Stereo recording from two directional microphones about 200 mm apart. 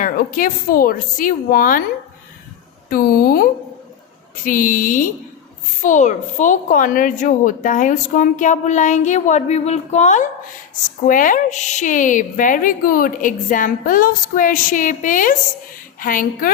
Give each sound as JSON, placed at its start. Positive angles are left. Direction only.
{"t": 0.0, "sound": "a woman's voice", "side_deg": 45}
{"t": 2.9, "sound": "a woman's voice", "side_deg": 45}